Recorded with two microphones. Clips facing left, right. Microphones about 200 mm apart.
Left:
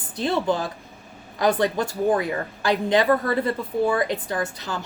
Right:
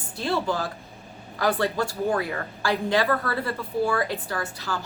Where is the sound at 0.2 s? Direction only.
20° left (ahead or behind).